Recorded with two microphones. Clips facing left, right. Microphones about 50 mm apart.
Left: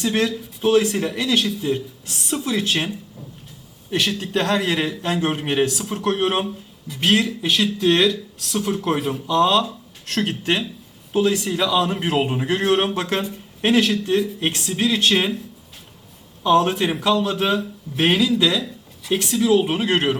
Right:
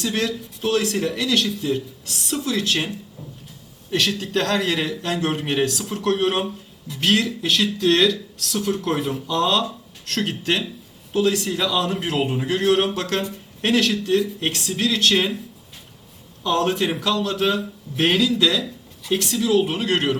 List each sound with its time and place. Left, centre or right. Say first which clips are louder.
0.0 s speech: left 3 dB; centre
3.9 s speech: even; centre
6.4 s speech: even; centre
7.0 s speech: left 1 dB; centre
11.9 s speech: left 2 dB; centre
16.4 s speech: left 4 dB; centre